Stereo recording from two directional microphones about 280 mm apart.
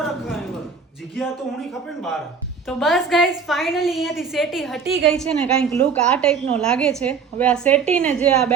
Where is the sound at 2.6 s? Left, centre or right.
Centre.